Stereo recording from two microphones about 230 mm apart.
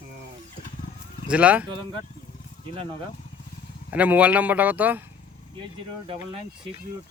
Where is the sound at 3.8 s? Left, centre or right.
Centre.